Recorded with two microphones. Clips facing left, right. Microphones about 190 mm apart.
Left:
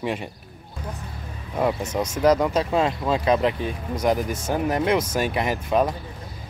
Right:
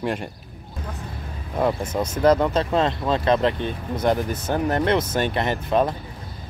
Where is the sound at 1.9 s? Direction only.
10° left (ahead or behind).